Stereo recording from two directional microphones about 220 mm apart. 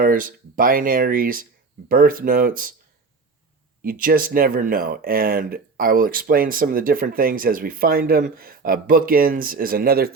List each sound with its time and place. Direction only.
0.0 s speech: 40° right (ahead or behind)
3.8 s speech: 40° right (ahead or behind)